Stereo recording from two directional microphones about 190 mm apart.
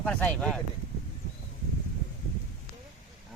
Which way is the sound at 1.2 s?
40° left (ahead or behind).